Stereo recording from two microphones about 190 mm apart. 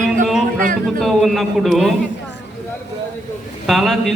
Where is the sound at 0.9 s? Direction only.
Centre (ahead or behind).